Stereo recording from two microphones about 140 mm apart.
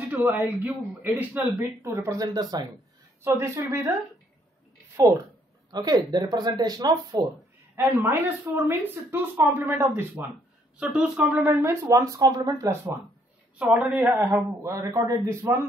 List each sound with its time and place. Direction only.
0.1 s speech: 10° right (ahead or behind)
4.9 s speech: 25° right (ahead or behind)
7.7 s speech: 15° right (ahead or behind)
10.8 s speech: 5° right (ahead or behind)
11.4 s speech: 15° right (ahead or behind)
13.6 s speech: 10° right (ahead or behind)